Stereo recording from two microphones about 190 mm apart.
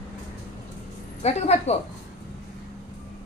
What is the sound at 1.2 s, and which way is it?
Speech, 35° left (ahead or behind).